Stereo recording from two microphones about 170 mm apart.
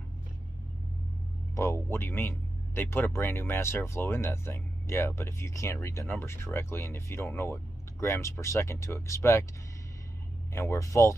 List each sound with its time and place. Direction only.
1.5 s speech: 15° left (ahead or behind)
10.5 s speech: 15° left (ahead or behind)